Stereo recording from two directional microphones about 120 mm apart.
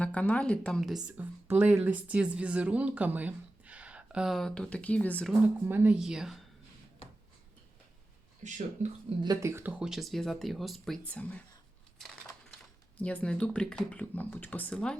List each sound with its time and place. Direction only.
0.0 s speech: 10° left (ahead or behind)
1.0 s speech: 15° right (ahead or behind); by 5.3 s 10° left (ahead or behind)
5.6 s speech: 15° right (ahead or behind)
6.0 s speech: 5° right (ahead or behind)
8.4 s speech: 90° right
9.2 s speech: 25° right (ahead or behind); by 11.0 s centre (ahead or behind)
11.0 s speech: 10° left (ahead or behind)
13.0 s speech: 10° left (ahead or behind)